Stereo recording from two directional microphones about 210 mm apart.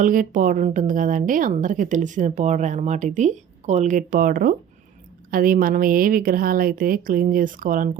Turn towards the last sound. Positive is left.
turn(degrees=-40)  # may be behind; listen again after turning